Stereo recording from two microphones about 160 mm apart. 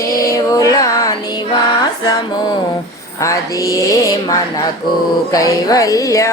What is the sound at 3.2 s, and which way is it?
Mantra, 20° left (ahead or behind).